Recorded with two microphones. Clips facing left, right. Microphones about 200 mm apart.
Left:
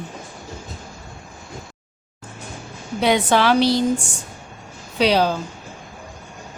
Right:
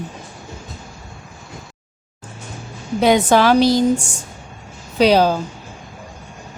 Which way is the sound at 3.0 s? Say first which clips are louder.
Right 4 dB; 45° right (ahead or behind).